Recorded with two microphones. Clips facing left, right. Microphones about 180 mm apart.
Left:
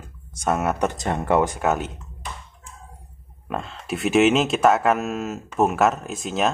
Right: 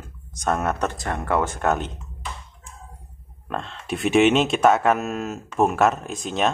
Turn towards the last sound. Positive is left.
turn(degrees=0)  # may be behind; listen again after turning